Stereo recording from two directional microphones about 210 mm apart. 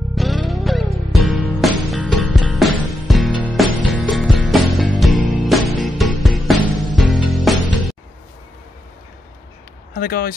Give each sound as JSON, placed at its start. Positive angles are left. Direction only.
{"t": 0.1, "sound": "music", "side_deg": 0}
{"t": 9.9, "sound": "speech", "side_deg": 45}